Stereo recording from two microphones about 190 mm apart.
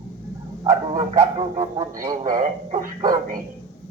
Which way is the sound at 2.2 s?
40° right (ahead or behind).